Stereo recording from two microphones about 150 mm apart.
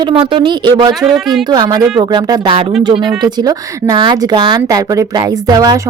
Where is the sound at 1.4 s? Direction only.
25° right (ahead or behind).